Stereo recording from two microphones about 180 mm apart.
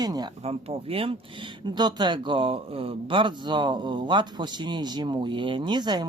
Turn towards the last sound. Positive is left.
turn(degrees=-25)  # may be behind; listen again after turning